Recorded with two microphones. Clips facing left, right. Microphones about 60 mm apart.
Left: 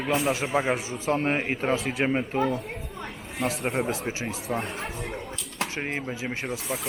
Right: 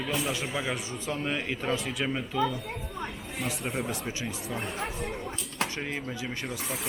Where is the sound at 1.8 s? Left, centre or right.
Left.